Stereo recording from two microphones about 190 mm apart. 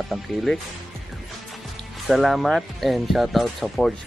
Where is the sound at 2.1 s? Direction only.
Centre (ahead or behind).